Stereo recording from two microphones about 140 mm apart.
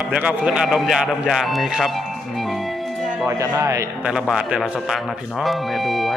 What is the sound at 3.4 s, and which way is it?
Speech, 25° right (ahead or behind).